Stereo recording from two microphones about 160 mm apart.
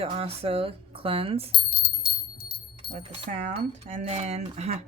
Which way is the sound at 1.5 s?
65° left (ahead or behind).